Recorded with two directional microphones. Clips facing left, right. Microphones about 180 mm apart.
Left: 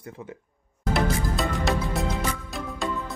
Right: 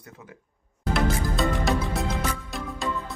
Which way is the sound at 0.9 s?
Centre (ahead or behind).